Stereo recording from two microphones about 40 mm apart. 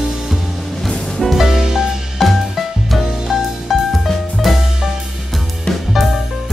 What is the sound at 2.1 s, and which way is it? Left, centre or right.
Music, centre.